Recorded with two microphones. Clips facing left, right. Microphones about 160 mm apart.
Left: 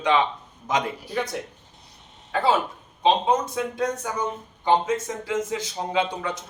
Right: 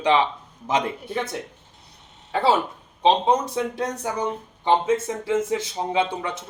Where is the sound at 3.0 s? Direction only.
30° right (ahead or behind).